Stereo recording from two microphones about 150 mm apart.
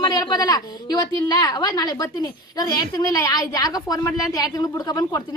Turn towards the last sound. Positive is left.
turn(degrees=25)  # may be behind; listen again after turning